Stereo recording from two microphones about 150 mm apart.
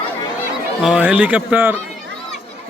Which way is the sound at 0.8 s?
5° right (ahead or behind).